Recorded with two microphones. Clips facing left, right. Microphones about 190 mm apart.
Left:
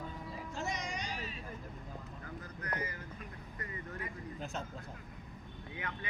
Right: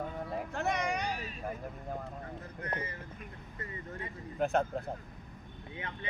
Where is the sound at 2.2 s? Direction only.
30° right (ahead or behind).